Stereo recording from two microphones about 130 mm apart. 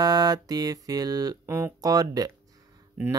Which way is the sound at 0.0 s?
30° right (ahead or behind).